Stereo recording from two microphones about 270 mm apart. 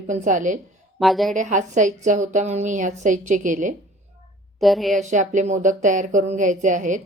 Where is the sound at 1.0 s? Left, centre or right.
Centre.